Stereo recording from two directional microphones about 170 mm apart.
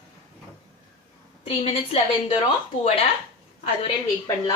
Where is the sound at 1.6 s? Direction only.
35° left (ahead or behind).